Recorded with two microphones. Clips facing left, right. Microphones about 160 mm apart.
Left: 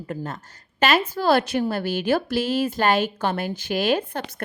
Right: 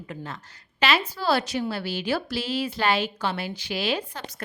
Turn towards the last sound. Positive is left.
turn(degrees=55)  # may be behind; listen again after turning